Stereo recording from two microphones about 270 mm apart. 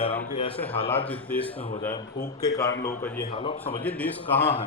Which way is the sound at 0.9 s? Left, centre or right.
Centre.